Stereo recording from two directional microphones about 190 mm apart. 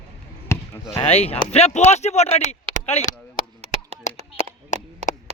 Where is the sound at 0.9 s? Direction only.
30° left (ahead or behind).